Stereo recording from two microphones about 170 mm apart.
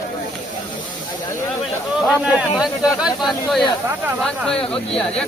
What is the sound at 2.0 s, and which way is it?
Speech, 5° right (ahead or behind).